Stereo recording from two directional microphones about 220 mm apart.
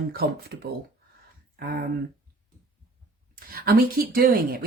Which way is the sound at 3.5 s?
40° right (ahead or behind).